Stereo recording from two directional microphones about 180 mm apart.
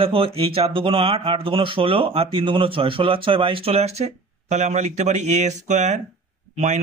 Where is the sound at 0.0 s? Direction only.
30° right (ahead or behind).